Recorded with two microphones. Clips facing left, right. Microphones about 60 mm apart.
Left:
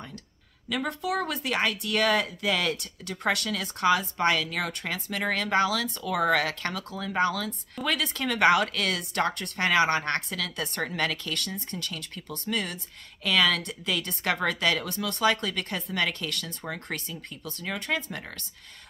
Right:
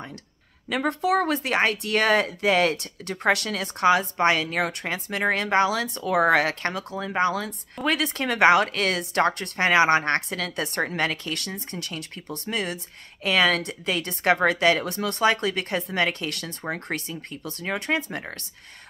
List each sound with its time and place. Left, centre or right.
0.7 s speech: right